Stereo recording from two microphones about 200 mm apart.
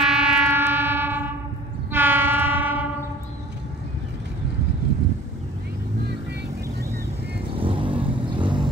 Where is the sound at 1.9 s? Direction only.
10° right (ahead or behind).